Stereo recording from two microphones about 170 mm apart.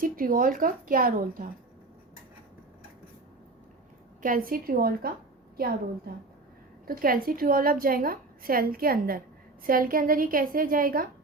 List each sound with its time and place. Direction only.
0.0 s a woman's voice: 55° right (ahead or behind)
4.2 s a woman's voice: 55° right (ahead or behind)
6.8 s a woman's voice: 60° right (ahead or behind)